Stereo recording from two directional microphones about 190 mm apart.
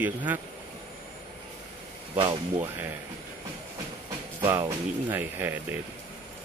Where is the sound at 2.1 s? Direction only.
15° right (ahead or behind).